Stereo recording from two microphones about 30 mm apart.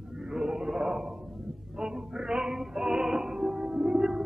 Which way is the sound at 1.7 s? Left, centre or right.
Right.